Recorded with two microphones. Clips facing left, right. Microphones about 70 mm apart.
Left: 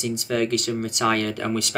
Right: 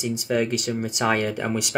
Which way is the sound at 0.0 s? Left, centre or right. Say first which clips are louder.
Even; centre.